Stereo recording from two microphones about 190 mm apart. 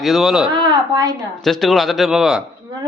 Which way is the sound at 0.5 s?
25° right (ahead or behind).